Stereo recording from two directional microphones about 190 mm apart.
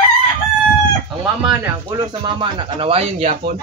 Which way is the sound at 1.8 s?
20° right (ahead or behind).